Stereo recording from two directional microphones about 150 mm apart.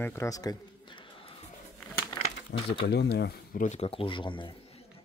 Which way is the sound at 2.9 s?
90° left.